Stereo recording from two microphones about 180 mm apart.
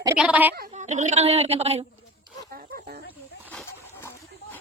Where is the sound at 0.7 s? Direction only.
40° right (ahead or behind).